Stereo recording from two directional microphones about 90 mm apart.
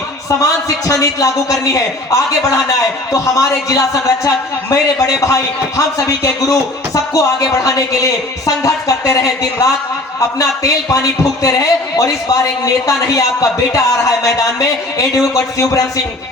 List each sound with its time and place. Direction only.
0.9 s speech: 40° left (ahead or behind)